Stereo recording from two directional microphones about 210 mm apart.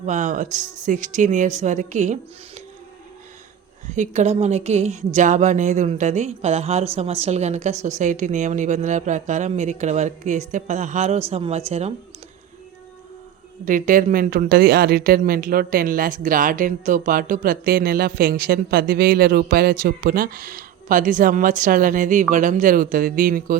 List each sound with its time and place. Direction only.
0.0 s a woman's voice: 35° right (ahead or behind)
3.9 s a woman's voice: 35° right (ahead or behind)
13.7 s a woman's voice: 40° right (ahead or behind)